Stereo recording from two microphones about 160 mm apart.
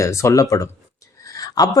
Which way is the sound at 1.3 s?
25° left (ahead or behind).